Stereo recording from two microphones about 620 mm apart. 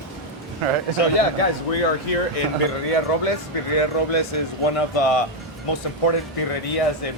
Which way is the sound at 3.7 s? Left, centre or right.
Left.